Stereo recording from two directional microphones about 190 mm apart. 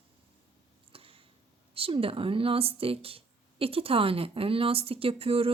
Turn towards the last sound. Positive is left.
turn(degrees=-30)  # may be behind; listen again after turning